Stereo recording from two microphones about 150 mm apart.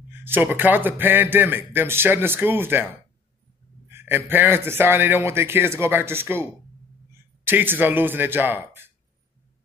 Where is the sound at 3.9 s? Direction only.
15° right (ahead or behind).